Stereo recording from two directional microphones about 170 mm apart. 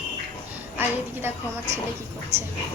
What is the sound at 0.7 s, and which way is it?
Speech, 15° right (ahead or behind).